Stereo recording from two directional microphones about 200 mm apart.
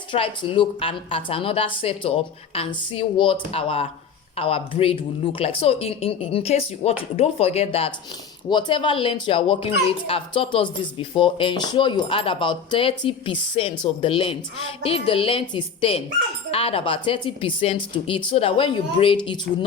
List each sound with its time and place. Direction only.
0.1 s speech: 25° left (ahead or behind)